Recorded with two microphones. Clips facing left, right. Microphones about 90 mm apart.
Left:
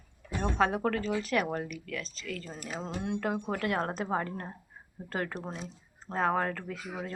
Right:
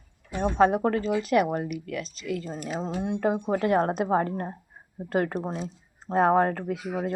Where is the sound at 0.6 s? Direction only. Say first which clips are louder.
Right 7 dB; 20° right (ahead or behind).